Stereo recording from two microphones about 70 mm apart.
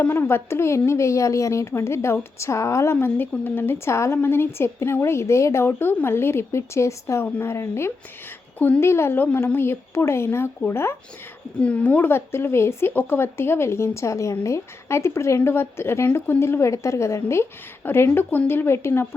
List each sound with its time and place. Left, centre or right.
0.0 s a woman's voice: left
8.5 s speech: left
8.8 s a woman's voice: left
11.6 s speech: left
12.1 s a woman's voice: left